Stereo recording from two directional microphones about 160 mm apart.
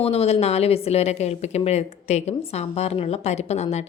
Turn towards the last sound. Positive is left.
turn(degrees=45)  # may be behind; listen again after turning